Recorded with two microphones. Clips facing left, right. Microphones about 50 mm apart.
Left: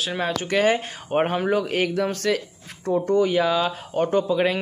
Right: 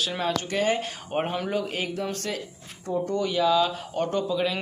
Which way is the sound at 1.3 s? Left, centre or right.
Left.